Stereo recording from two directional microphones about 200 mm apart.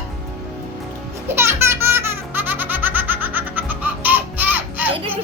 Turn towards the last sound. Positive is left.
turn(degrees=-10)  # may be behind; listen again after turning